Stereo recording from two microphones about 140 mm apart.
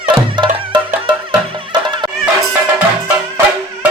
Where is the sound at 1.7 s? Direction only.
30° right (ahead or behind).